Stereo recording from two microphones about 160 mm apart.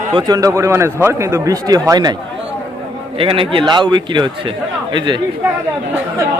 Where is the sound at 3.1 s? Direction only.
35° right (ahead or behind).